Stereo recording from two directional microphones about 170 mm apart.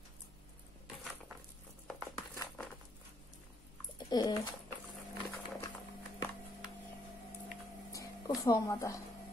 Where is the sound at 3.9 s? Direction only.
25° left (ahead or behind).